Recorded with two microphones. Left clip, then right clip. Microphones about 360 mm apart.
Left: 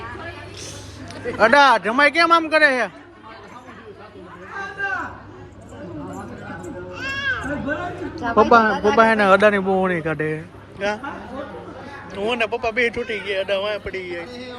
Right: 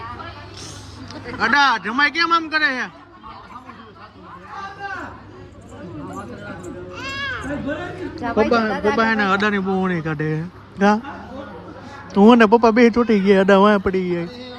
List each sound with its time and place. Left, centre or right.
1.4 s a man's voice: centre
6.1 s a sound: centre
8.4 s a man's voice: centre
12.1 s a man's voice: right
14.0 s a man's voice: centre